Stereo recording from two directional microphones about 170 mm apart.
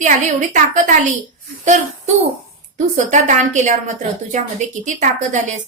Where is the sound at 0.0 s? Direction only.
50° right (ahead or behind).